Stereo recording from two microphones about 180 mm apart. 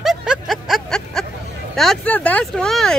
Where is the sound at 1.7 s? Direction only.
5° left (ahead or behind).